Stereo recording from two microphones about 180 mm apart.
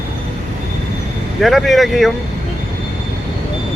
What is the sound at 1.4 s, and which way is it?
Speech, centre (ahead or behind).